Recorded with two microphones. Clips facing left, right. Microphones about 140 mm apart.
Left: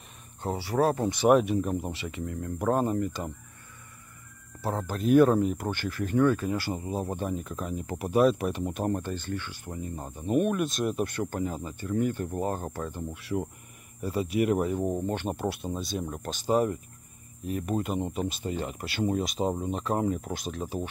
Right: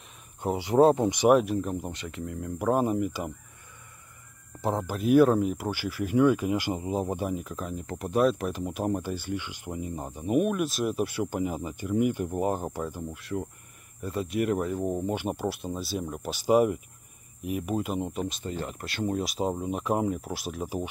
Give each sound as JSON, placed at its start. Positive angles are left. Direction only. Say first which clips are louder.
{"t": 0.4, "sound": "speech", "louder": "right 5 dB", "side_deg": -15}
{"t": 1.3, "sound": "speech", "louder": "even", "side_deg": 0}
{"t": 4.6, "sound": "speech", "louder": "right 3 dB", "side_deg": -15}
{"t": 4.9, "sound": "speech", "louder": "even", "side_deg": -5}
{"t": 13.2, "sound": "speech", "louder": "left 3 dB", "side_deg": 5}